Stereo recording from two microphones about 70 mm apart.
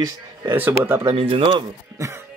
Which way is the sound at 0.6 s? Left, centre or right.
Right.